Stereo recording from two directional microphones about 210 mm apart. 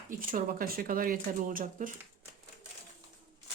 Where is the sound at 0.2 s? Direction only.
40° right (ahead or behind).